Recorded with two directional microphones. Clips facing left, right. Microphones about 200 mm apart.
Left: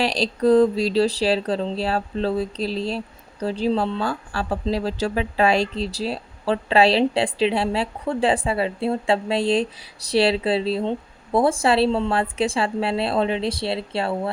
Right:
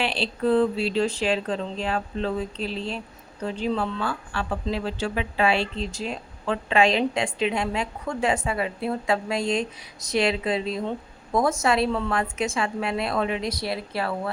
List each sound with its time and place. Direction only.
0.0 s speech: 40° left (ahead or behind)